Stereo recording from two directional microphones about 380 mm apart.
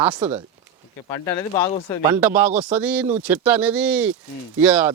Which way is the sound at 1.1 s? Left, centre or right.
Centre.